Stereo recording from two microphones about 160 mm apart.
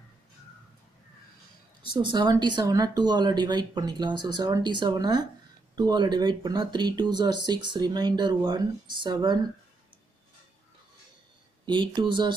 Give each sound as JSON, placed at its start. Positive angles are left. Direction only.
{"t": 1.9, "sound": "speech", "side_deg": -30}
{"t": 11.6, "sound": "speech", "side_deg": -30}